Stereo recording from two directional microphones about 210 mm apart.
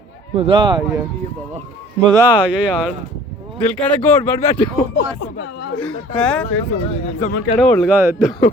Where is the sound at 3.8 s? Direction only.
5° left (ahead or behind).